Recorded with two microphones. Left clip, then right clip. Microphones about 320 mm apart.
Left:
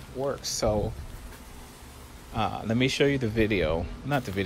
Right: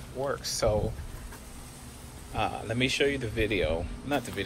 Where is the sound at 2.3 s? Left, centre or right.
Left.